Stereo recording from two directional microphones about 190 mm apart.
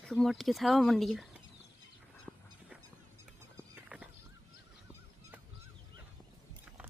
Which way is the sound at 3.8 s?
5° right (ahead or behind).